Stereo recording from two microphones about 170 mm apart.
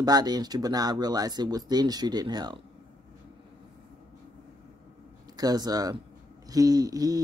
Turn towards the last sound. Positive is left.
turn(degrees=-20)  # may be behind; listen again after turning